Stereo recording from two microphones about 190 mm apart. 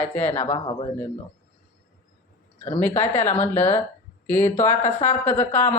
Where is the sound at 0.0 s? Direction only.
10° left (ahead or behind).